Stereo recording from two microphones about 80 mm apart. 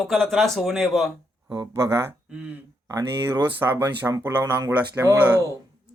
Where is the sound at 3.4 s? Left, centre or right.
Right.